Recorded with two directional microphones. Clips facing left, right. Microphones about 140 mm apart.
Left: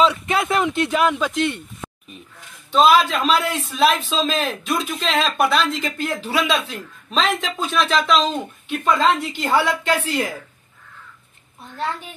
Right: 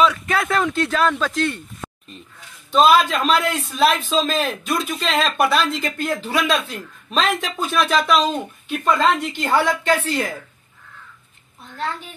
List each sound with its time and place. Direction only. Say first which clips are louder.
0.0 s speech: even; 25° left (ahead or behind)
2.7 s a man's voice: even; centre (ahead or behind)
8.9 s a woman's voice: even; 10° left (ahead or behind)